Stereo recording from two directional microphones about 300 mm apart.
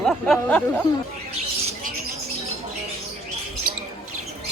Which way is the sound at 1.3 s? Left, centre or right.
Right.